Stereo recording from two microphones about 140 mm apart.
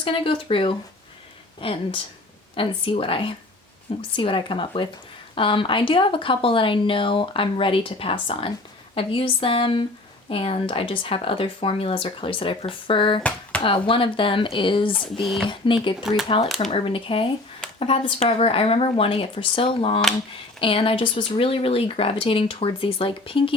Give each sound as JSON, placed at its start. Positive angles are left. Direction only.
{"t": 0.0, "sound": "speech", "side_deg": 40}
{"t": 14.9, "sound": "speech", "side_deg": 0}
{"t": 15.4, "sound": "speech", "side_deg": 35}